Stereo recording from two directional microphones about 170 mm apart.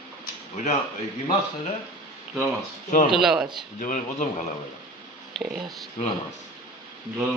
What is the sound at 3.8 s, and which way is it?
Speech, 50° left (ahead or behind).